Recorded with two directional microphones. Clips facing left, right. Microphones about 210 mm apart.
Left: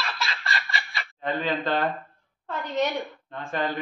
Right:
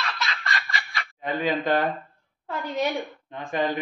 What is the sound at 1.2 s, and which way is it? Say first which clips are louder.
Speech: right 2 dB; 10° right (ahead or behind).